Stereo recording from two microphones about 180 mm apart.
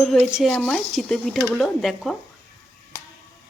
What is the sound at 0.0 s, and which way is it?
Speech, centre (ahead or behind).